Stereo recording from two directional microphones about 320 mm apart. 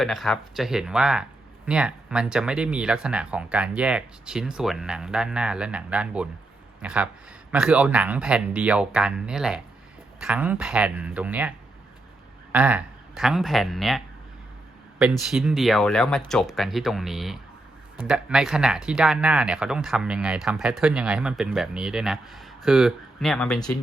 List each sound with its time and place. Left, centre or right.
0.0 s speech: centre
15.3 s speech: centre